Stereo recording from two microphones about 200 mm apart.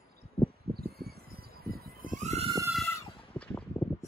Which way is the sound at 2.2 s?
35° right (ahead or behind).